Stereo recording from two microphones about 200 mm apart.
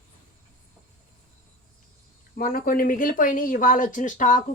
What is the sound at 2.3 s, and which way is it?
Speech, 45° left (ahead or behind).